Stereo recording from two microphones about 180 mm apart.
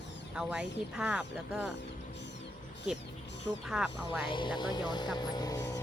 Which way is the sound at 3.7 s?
5° right (ahead or behind).